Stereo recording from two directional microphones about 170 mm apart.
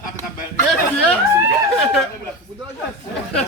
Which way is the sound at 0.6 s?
5° left (ahead or behind).